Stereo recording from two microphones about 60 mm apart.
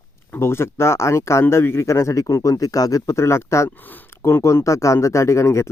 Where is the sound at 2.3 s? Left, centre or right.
Left.